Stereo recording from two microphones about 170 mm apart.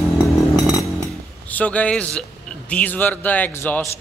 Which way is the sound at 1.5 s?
10° left (ahead or behind).